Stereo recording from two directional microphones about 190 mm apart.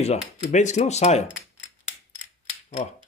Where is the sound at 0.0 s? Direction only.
35° left (ahead or behind).